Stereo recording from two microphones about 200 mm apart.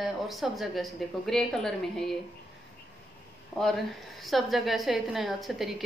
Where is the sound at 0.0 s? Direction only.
Centre (ahead or behind).